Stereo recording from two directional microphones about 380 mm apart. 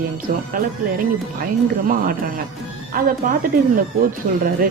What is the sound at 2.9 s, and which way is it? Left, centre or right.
Speech, right.